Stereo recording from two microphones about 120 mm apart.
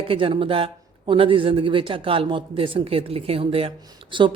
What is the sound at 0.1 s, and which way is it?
Speech, 45° right (ahead or behind).